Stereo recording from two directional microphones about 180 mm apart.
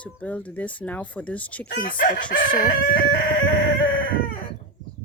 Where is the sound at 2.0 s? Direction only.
50° left (ahead or behind).